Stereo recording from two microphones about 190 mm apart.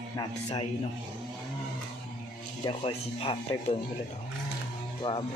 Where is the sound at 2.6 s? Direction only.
30° left (ahead or behind).